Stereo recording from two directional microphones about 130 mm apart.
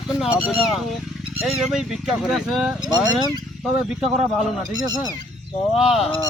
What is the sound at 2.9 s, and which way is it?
Speech, 30° right (ahead or behind).